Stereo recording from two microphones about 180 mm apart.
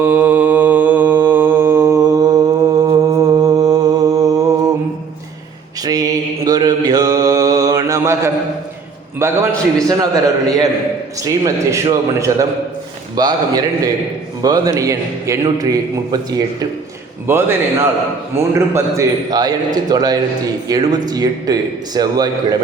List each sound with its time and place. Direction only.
0.0 s mantra: 10° right (ahead or behind)
5.8 s mantra: 20° right (ahead or behind)
9.1 s a man's voice: 15° right (ahead or behind)